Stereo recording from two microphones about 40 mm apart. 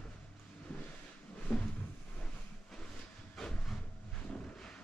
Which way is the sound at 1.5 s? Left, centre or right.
Left.